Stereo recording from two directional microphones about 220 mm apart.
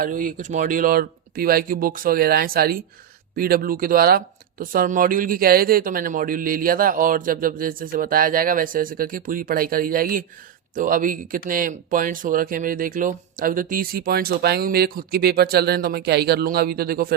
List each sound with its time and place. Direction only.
0.0 s speech: 40° right (ahead or behind)